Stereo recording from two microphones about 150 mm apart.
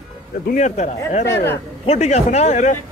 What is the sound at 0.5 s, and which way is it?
Speech, 55° left (ahead or behind).